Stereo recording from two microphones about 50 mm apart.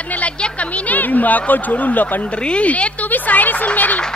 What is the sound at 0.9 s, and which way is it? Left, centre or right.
A woman's voice, left.